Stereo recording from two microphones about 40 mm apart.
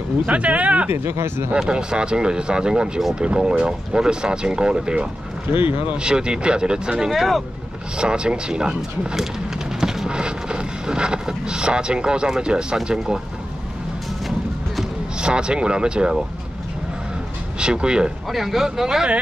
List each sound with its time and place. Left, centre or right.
0.3 s speech: right
0.8 s speech: right
1.7 s speech: right
7.1 s speech: centre
8.0 s speech: right
9.8 s a sound: centre
10.1 s speech: right
15.1 s speech: right
17.6 s speech: right
18.3 s speech: centre